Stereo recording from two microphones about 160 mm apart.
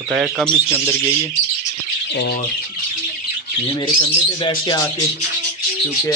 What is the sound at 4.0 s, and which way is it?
Speech, 30° left (ahead or behind).